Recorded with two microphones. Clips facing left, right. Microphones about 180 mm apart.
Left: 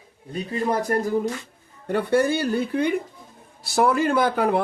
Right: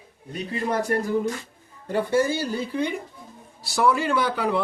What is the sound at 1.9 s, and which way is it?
Speech, 60° left (ahead or behind).